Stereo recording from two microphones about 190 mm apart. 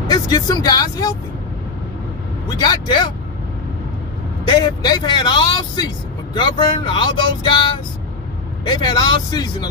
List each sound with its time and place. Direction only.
0.0 s speech: 20° left (ahead or behind)
2.4 s speech: 20° left (ahead or behind)
4.5 s speech: 25° left (ahead or behind)